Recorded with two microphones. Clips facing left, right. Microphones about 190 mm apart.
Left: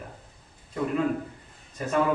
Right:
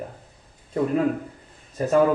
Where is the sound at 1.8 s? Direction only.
40° right (ahead or behind).